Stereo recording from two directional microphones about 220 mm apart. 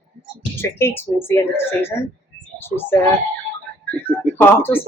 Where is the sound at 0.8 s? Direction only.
10° left (ahead or behind).